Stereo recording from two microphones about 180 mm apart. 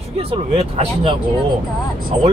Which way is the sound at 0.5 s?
35° right (ahead or behind).